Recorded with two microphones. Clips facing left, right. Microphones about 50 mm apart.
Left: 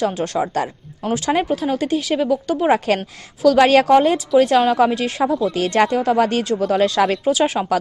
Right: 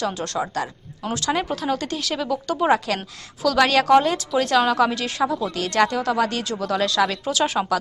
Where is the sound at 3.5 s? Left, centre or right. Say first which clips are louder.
Left 4 dB; left.